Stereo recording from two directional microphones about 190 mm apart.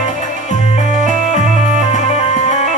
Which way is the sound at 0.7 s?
40° left (ahead or behind).